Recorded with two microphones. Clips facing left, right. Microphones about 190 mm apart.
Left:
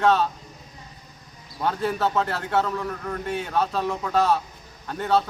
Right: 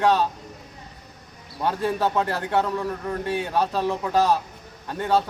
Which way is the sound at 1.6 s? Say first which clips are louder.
Right 1 dB; 15° right (ahead or behind).